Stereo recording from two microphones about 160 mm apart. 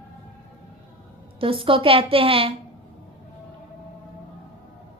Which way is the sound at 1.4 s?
35° right (ahead or behind).